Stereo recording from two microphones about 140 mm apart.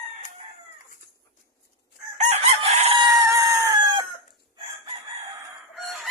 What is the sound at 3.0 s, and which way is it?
Chicken, 25° right (ahead or behind).